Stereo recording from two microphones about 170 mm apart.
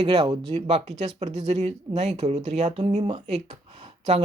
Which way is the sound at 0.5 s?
40° right (ahead or behind).